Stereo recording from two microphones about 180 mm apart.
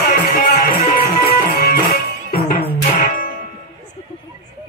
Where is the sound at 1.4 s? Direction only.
55° left (ahead or behind).